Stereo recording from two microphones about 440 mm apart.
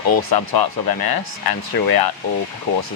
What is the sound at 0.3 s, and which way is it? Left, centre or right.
Speech, left.